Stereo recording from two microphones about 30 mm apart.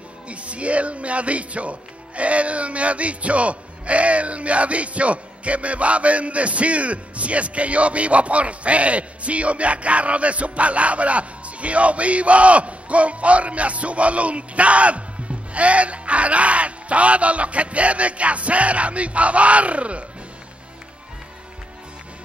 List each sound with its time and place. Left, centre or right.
0.3 s speech: right